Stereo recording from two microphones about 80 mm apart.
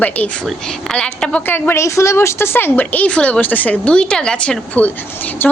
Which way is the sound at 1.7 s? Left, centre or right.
Left.